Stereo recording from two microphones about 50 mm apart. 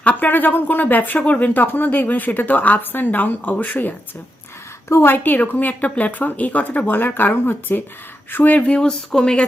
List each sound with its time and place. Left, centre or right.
0.0 s speech: left
4.9 s a woman's voice: left
5.1 s speech: left
8.5 s speech: left